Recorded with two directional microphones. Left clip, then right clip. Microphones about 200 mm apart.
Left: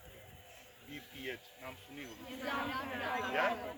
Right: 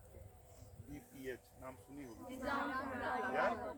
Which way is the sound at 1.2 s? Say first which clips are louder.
Left 3 dB; 5° right (ahead or behind).